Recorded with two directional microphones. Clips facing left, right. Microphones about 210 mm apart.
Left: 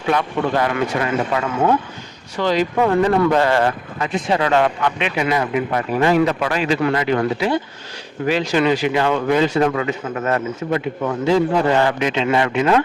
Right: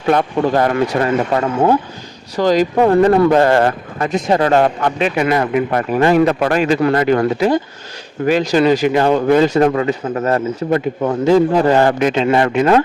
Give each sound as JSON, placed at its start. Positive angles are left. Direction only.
{"t": 0.0, "sound": "speech", "side_deg": -45}